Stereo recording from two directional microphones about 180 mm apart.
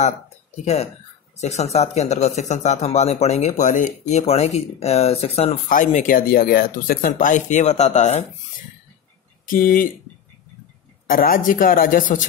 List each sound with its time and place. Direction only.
1.3 s speech: 40° left (ahead or behind)
5.9 s speech: 45° left (ahead or behind)
9.5 s speech: 50° left (ahead or behind)
11.1 s speech: 50° left (ahead or behind)